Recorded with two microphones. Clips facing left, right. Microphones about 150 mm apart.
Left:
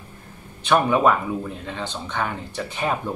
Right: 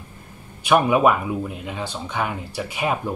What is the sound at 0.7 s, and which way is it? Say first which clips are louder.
Speech: right 1 dB; 10° right (ahead or behind).